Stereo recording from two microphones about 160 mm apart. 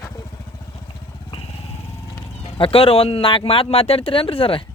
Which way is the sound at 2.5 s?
35° left (ahead or behind).